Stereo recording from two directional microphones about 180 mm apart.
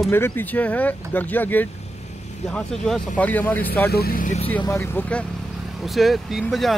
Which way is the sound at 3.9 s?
55° left (ahead or behind).